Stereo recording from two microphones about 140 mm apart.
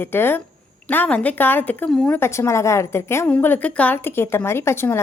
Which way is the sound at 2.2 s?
20° left (ahead or behind).